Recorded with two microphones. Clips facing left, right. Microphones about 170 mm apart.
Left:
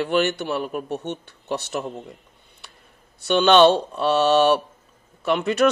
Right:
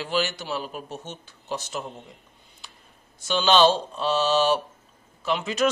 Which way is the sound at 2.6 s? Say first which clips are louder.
Left 1 dB; 65° left (ahead or behind).